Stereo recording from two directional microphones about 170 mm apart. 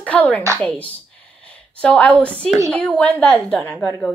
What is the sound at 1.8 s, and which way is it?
A woman's voice, 5° left (ahead or behind).